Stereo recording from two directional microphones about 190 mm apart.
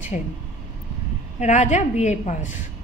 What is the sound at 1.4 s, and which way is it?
A woman's voice, 40° left (ahead or behind).